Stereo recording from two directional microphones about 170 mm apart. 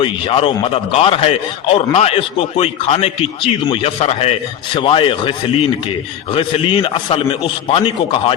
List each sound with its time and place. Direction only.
0.0 s a man's voice: 30° left (ahead or behind)
6.3 s a man's voice: 30° left (ahead or behind)